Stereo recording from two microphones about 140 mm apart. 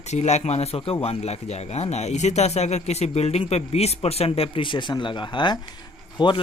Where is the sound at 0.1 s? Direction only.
55° left (ahead or behind).